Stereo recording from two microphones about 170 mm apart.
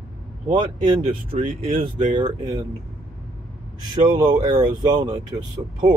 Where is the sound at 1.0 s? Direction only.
35° right (ahead or behind).